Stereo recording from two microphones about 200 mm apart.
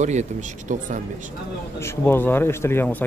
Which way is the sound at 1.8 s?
10° left (ahead or behind).